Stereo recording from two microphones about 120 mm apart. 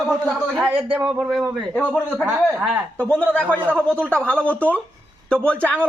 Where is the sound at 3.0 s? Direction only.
10° left (ahead or behind).